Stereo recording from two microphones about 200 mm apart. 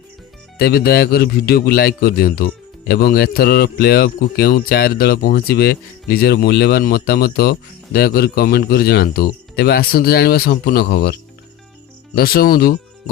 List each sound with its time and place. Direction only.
0.6 s a man's voice: 50° left (ahead or behind)